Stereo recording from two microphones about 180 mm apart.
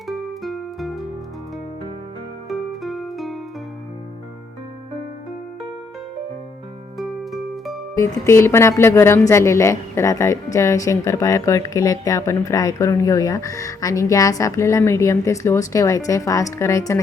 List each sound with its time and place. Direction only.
0.1 s music: centre (ahead or behind)
2.5 s music: centre (ahead or behind)
7.0 s music: centre (ahead or behind)
7.9 s speech: 15° left (ahead or behind)